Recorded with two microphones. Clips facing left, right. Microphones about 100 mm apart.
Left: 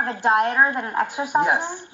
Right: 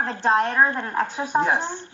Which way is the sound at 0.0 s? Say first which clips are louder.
Left 1 dB; 15° left (ahead or behind).